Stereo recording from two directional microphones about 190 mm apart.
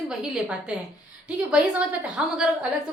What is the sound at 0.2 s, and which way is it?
A woman's voice, 5° right (ahead or behind).